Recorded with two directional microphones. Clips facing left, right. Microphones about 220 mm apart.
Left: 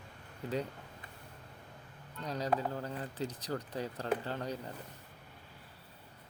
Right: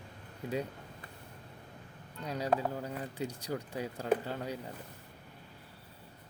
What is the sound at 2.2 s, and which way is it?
Speech, 10° right (ahead or behind).